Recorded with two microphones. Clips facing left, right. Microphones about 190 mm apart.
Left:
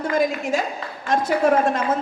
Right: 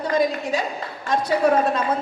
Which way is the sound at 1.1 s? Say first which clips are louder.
Left 1 dB; 45° left (ahead or behind).